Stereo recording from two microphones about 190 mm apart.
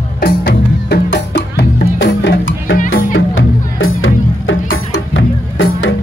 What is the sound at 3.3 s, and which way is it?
Music, 85° left.